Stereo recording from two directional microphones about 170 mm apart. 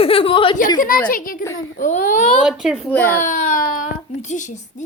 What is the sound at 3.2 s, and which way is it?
A child's voice, 50° left (ahead or behind).